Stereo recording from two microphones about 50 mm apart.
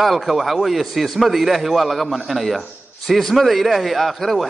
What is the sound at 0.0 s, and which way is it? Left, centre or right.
A man's voice, centre.